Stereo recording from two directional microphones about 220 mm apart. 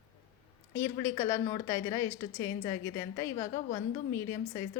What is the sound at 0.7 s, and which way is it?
A woman's voice, 15° left (ahead or behind).